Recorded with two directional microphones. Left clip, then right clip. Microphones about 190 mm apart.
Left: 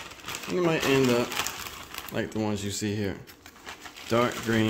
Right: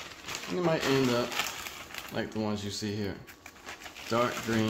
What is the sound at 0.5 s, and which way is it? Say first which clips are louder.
Speech: left 4 dB; 40° left (ahead or behind).